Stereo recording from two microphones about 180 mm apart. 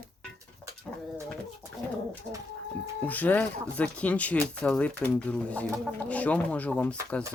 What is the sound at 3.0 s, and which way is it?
Speech, 10° left (ahead or behind).